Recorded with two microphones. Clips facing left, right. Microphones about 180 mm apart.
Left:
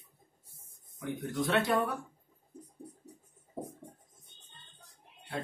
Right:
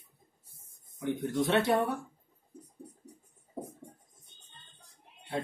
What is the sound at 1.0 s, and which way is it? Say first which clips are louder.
Speech: right 4 dB; 25° right (ahead or behind).